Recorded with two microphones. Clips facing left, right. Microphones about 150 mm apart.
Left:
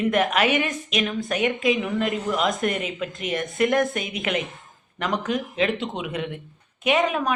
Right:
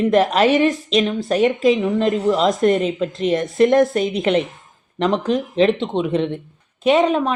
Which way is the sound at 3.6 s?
20° right (ahead or behind).